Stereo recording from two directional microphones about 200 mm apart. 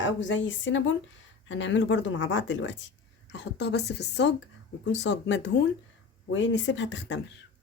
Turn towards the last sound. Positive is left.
turn(degrees=60)  # may be behind; listen again after turning